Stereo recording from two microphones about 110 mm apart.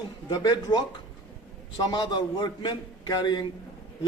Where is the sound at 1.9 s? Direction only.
40° left (ahead or behind).